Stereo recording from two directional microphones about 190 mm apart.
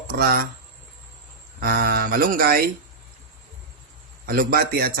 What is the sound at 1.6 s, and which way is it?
Speech, 50° right (ahead or behind).